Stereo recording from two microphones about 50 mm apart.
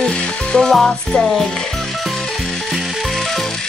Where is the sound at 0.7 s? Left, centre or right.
Centre.